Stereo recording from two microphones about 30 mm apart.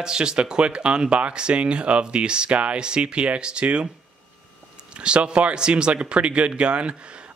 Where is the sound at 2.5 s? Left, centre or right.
Right.